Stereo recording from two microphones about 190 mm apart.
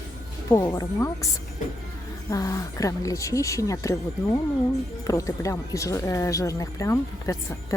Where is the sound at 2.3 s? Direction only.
20° left (ahead or behind).